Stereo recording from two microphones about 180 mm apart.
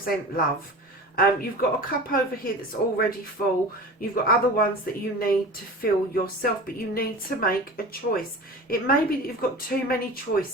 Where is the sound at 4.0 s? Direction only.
55° left (ahead or behind).